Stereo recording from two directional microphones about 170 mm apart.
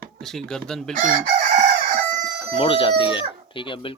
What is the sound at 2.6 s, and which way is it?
Speech, 30° left (ahead or behind).